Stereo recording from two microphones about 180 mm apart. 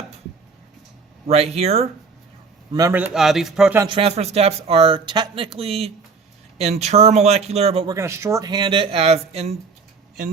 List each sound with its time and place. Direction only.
1.5 s speech: 35° right (ahead or behind)
2.7 s a man's voice: 15° right (ahead or behind)
3.8 s speech: 30° right (ahead or behind)
7.9 s speech: 15° right (ahead or behind); by 9.6 s 35° right (ahead or behind)